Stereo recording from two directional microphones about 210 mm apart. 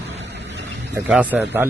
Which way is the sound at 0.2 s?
55° right (ahead or behind).